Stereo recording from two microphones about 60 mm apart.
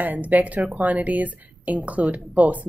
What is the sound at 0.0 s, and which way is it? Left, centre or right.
A woman's voice, right.